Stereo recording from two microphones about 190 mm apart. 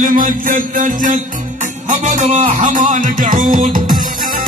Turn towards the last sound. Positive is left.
turn(degrees=-45)  # may be behind; listen again after turning